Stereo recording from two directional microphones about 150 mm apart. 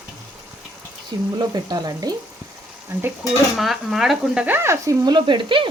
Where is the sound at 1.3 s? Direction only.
25° right (ahead or behind).